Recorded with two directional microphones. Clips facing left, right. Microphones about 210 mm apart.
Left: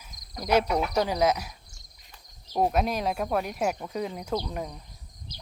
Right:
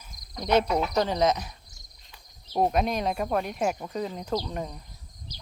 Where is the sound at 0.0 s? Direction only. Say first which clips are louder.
Right 1 dB; 5° left (ahead or behind).